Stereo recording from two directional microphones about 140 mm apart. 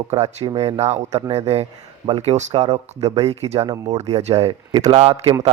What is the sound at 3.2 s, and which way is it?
Speech, 50° right (ahead or behind).